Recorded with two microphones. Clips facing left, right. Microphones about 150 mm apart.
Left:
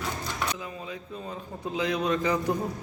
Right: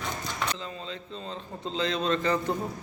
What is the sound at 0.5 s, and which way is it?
A man's voice, 10° left (ahead or behind).